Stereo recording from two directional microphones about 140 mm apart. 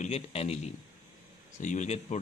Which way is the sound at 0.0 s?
45° left (ahead or behind).